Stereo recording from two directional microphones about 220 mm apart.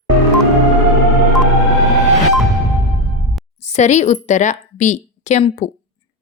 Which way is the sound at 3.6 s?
30° left (ahead or behind).